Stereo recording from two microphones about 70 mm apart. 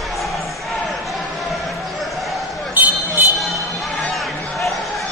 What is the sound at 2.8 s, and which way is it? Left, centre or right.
Vehicle, right.